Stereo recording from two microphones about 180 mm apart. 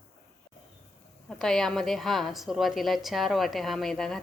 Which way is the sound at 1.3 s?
Centre (ahead or behind).